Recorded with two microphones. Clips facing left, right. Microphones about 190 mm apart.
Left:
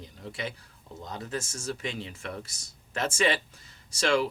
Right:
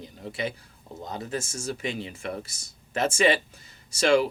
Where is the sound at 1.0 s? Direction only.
20° right (ahead or behind).